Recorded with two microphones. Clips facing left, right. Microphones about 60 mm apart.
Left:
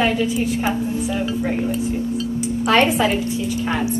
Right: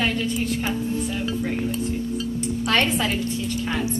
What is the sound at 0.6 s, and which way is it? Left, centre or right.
A woman's voice, centre.